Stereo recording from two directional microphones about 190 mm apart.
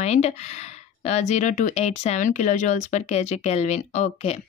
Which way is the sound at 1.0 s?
35° left (ahead or behind).